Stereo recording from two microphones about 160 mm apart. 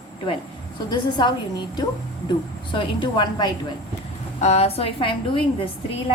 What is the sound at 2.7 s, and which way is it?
Speech, 30° left (ahead or behind).